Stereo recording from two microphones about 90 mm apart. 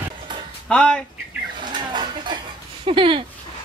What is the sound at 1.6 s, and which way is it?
Bird, 55° right (ahead or behind).